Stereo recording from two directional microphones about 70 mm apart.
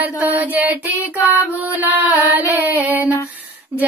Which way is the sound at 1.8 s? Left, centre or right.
Right.